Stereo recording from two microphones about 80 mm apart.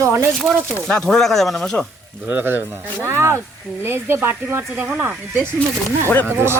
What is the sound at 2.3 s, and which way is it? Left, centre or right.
Speech, right.